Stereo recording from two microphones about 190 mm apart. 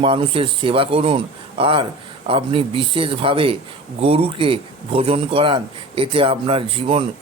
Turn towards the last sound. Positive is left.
turn(degrees=-30)  # may be behind; listen again after turning